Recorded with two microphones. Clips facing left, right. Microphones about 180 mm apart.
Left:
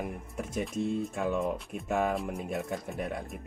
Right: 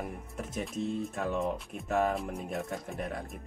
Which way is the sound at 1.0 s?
Centre (ahead or behind).